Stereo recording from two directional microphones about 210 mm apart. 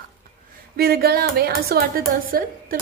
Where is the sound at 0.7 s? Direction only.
50° right (ahead or behind).